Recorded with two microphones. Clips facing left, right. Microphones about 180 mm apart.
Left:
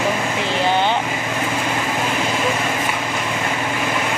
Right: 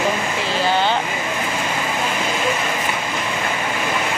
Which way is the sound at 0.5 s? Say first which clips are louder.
Even; 20° left (ahead or behind).